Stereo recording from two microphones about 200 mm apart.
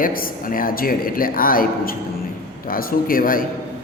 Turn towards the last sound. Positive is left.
turn(degrees=45)  # may be behind; listen again after turning